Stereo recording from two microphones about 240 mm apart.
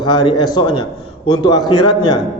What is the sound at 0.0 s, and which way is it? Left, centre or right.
A man's voice, centre.